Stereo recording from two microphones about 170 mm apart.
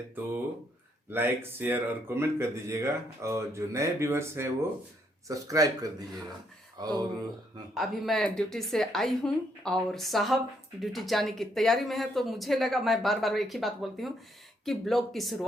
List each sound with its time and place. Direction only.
1.1 s speech: 15° right (ahead or behind)
7.7 s speech: centre (ahead or behind)